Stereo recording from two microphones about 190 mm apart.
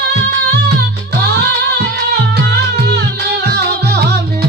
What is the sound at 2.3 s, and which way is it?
Music, 60° right (ahead or behind).